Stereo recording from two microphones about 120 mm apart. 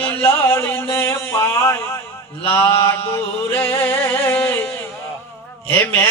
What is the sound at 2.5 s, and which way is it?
Speech, 15° left (ahead or behind).